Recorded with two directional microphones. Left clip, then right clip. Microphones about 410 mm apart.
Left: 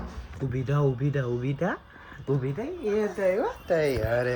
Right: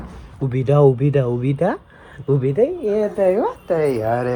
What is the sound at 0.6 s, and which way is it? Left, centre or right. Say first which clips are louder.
Speech: right 14 dB; right.